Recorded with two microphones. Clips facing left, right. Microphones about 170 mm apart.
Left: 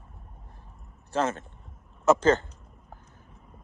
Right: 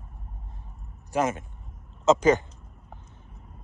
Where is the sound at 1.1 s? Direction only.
10° right (ahead or behind).